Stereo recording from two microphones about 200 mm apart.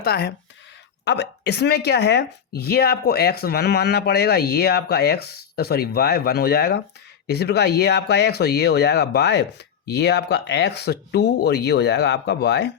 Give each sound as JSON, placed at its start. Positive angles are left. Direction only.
{"t": 0.0, "sound": "speech", "side_deg": 55}